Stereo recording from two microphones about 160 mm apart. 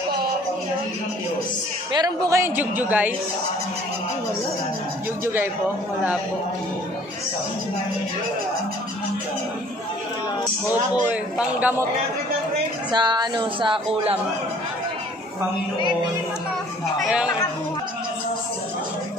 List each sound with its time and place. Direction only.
1.9 s a woman's voice: 25° right (ahead or behind)
5.2 s a woman's voice: 10° right (ahead or behind)
11.1 s a woman's voice: 10° right (ahead or behind)
12.9 s speech: 25° right (ahead or behind)
17.0 s a woman's voice: 5° right (ahead or behind)